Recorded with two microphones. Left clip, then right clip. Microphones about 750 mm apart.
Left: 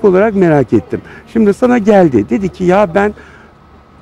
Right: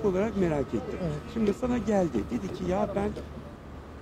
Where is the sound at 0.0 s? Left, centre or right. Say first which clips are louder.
Left 18 dB; left.